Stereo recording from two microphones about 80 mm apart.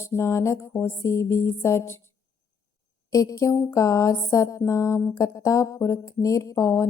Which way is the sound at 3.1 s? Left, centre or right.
Left.